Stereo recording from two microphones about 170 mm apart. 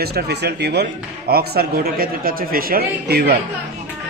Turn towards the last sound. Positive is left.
turn(degrees=-70)  # may be behind; listen again after turning